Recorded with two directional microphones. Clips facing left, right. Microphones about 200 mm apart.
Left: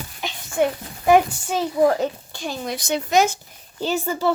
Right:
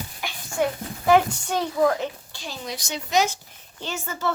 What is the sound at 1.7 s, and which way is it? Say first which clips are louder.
Speech: left 4 dB; 25° left (ahead or behind).